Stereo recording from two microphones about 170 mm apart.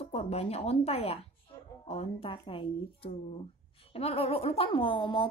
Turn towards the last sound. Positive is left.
turn(degrees=30)  # may be behind; listen again after turning